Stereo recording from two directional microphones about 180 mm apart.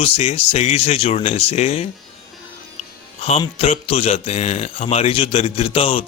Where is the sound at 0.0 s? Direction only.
35° left (ahead or behind).